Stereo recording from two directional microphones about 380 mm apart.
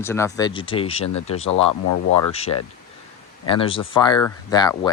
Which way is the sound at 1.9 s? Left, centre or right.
Left.